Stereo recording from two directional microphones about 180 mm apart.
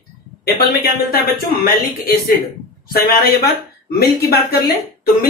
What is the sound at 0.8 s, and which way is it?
Speech, 55° left (ahead or behind).